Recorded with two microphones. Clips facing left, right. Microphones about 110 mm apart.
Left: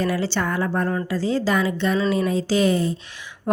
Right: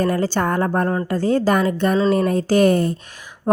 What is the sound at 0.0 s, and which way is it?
A woman's voice, 45° right (ahead or behind).